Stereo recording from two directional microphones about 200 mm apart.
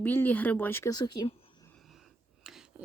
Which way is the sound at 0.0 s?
10° left (ahead or behind).